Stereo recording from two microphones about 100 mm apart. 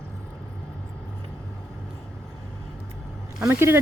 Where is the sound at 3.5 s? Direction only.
25° right (ahead or behind).